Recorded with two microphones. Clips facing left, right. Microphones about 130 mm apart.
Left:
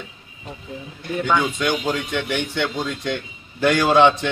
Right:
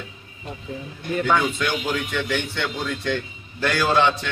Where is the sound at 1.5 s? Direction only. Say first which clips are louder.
Left 3 dB; 15° left (ahead or behind).